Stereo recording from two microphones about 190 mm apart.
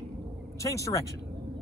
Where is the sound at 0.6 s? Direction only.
15° left (ahead or behind).